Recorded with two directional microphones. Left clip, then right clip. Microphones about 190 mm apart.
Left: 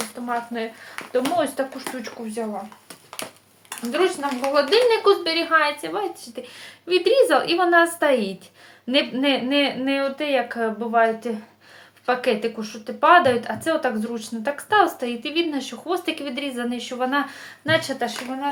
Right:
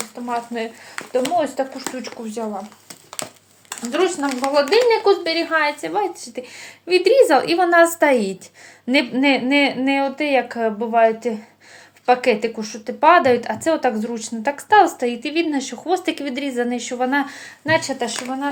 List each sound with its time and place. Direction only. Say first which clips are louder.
0.3 s speech: right 3 dB; 20° right (ahead or behind)
1.0 s a sound: right 4 dB; 45° right (ahead or behind)
1.4 s speech: right 2 dB; 15° right (ahead or behind)
3.7 s a woman's voice: right 2 dB; 40° right (ahead or behind)
4.9 s a woman's voice: right 2 dB; 15° right (ahead or behind)